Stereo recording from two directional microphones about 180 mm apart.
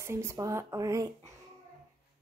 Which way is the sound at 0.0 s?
15° right (ahead or behind).